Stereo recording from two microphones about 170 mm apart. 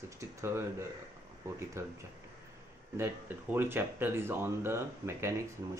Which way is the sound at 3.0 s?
10° right (ahead or behind).